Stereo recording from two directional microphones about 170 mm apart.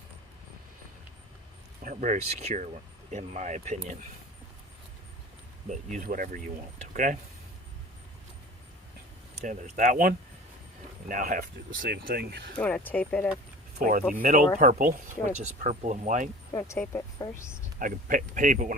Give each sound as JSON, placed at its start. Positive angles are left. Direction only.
{"t": 1.8, "sound": "speech", "side_deg": -50}
{"t": 5.6, "sound": "speech", "side_deg": -45}
{"t": 9.4, "sound": "speech", "side_deg": -45}
{"t": 12.5, "sound": "speech", "side_deg": 10}
{"t": 13.7, "sound": "speech", "side_deg": -55}
{"t": 16.6, "sound": "speech", "side_deg": 15}
{"t": 17.7, "sound": "speech", "side_deg": -55}